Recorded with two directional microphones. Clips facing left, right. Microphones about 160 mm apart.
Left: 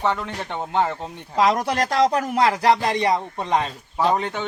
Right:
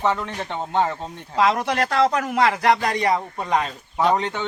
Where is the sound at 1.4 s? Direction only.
35° left (ahead or behind).